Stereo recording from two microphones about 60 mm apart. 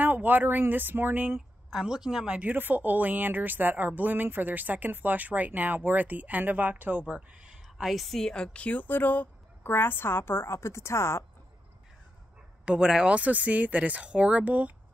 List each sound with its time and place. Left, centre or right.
0.0 s speech: right
1.8 s a woman's voice: centre
2.4 s a woman's voice: right
7.6 s a woman's voice: centre
8.6 s speech: left
12.6 s a woman's voice: centre